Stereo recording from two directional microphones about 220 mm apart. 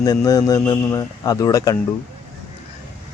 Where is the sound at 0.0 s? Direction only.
15° left (ahead or behind).